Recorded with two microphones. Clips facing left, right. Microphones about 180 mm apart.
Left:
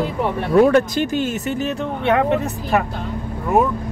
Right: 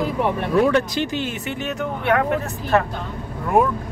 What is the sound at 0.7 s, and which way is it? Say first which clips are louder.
Speech: left 4 dB; 50° left (ahead or behind).